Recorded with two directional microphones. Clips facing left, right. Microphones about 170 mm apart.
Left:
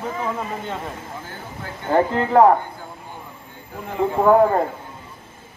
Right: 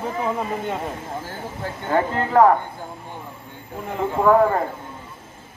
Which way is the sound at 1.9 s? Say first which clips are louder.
Left 2 dB; 20° left (ahead or behind).